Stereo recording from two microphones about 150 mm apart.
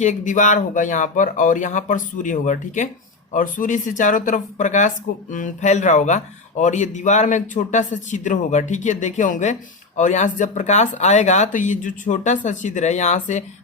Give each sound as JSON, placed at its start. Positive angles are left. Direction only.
{"t": 0.0, "sound": "speech", "side_deg": 55}